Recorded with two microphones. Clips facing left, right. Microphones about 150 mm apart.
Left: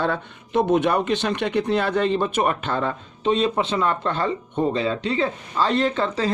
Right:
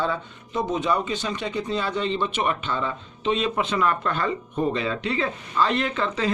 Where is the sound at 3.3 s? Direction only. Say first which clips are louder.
Left 3 dB; 35° left (ahead or behind).